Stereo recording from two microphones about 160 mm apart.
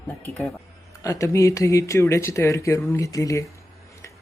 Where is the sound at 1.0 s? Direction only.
20° left (ahead or behind).